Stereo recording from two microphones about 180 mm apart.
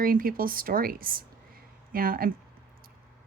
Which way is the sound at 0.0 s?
50° right (ahead or behind).